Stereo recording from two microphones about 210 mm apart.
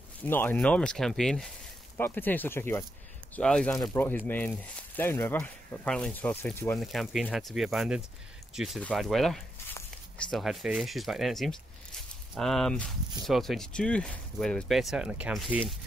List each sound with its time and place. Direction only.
0.2 s speech: 10° left (ahead or behind)
6.8 s speech: centre (ahead or behind)